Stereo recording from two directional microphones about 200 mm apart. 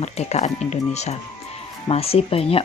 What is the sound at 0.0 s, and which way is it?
Speech, 35° left (ahead or behind).